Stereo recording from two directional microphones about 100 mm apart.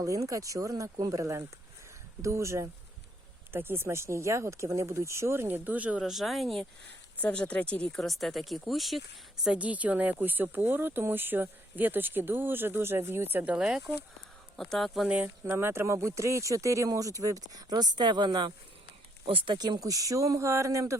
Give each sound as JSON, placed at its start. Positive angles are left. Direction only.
{"t": 0.0, "sound": "speech", "side_deg": -35}
{"t": 6.0, "sound": "speech", "side_deg": 0}
{"t": 7.2, "sound": "speech", "side_deg": 10}
{"t": 9.5, "sound": "speech", "side_deg": -15}
{"t": 14.5, "sound": "speech", "side_deg": 5}
{"t": 15.0, "sound": "speech", "side_deg": -15}
{"t": 15.5, "sound": "speech", "side_deg": -25}
{"t": 19.2, "sound": "speech", "side_deg": -65}
{"t": 19.5, "sound": "speech", "side_deg": -40}